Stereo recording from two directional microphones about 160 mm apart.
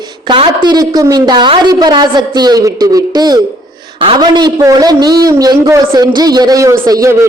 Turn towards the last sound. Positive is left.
turn(degrees=-20)  # may be behind; listen again after turning